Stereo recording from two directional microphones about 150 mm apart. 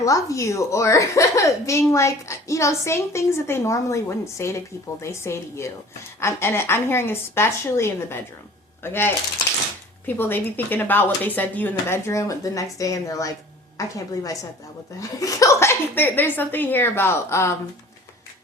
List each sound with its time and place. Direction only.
0.0 s a woman's voice: 20° left (ahead or behind)
15.2 s a woman's voice: 20° left (ahead or behind)